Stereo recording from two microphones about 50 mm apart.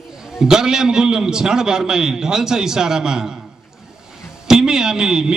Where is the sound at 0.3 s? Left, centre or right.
Centre.